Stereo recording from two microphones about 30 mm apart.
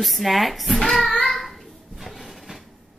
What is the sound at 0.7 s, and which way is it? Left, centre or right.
Child singing, centre.